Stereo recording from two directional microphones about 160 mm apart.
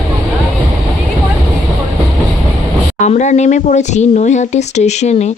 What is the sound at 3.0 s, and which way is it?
Speech, 50° left (ahead or behind).